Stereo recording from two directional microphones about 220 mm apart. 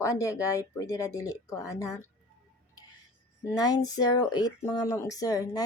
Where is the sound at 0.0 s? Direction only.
15° left (ahead or behind).